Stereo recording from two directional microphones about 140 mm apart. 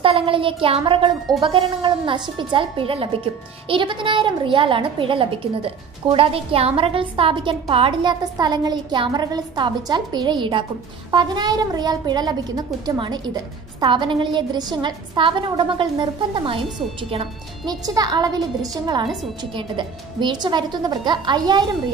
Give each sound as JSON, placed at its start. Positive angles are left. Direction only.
{"t": 0.0, "sound": "a woman's voice", "side_deg": -40}
{"t": 17.6, "sound": "a woman's voice", "side_deg": -30}